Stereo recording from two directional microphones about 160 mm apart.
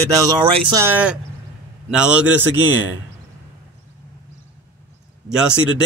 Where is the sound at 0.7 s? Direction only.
15° right (ahead or behind).